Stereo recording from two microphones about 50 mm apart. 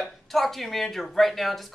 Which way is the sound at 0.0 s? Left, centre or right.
Centre.